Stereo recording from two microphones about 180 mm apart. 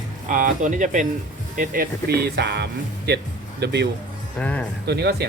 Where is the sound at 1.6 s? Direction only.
55° right (ahead or behind).